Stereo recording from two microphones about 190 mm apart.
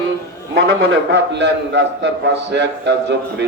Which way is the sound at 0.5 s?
60° right (ahead or behind).